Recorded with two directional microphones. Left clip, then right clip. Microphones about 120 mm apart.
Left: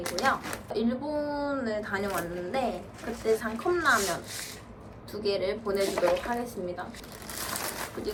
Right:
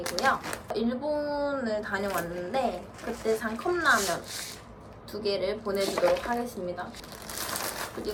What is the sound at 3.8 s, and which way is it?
Speech, centre (ahead or behind).